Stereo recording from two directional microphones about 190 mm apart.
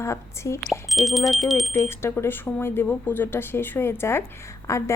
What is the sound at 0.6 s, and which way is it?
Speech, centre (ahead or behind).